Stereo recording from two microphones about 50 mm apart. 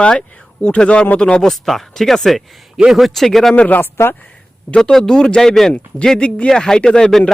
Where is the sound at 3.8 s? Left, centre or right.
Left.